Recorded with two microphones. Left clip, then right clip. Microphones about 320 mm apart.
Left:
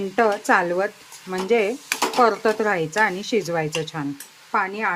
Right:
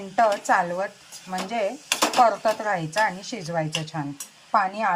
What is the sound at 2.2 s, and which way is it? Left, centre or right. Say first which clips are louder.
Speech: left 2 dB; left.